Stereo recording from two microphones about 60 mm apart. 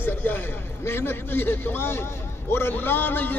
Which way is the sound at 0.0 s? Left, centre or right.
Left.